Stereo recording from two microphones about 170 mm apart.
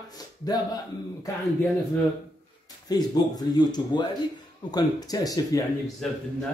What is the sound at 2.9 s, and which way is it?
Speech, 25° left (ahead or behind).